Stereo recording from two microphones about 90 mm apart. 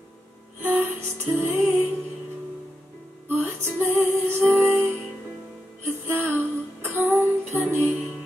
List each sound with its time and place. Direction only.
0.6 s music: 25° right (ahead or behind)
3.4 s music: 25° right (ahead or behind)